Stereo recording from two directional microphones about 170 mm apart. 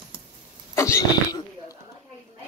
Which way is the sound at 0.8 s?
15° left (ahead or behind).